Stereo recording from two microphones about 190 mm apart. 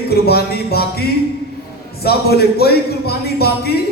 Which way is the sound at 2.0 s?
55° left (ahead or behind).